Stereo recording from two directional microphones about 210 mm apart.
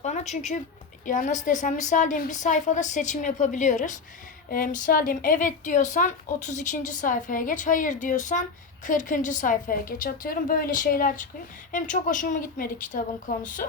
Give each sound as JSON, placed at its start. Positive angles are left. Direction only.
{"t": 0.0, "sound": "a woman's voice", "side_deg": 35}